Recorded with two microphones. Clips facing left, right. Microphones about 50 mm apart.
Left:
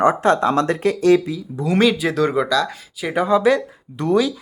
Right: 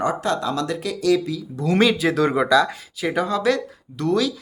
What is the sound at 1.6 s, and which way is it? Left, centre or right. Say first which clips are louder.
Speech: left 1 dB; centre.